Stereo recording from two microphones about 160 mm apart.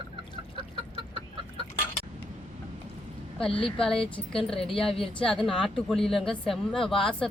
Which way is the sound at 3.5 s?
35° left (ahead or behind).